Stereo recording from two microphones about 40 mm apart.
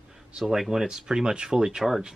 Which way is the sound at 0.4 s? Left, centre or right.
Centre.